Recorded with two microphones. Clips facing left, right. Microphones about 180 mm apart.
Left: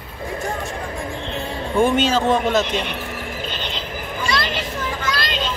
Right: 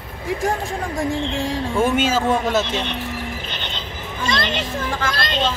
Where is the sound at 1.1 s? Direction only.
90° right.